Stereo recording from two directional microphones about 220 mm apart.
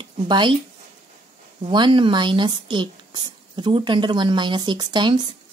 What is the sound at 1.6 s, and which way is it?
Speech, 20° right (ahead or behind).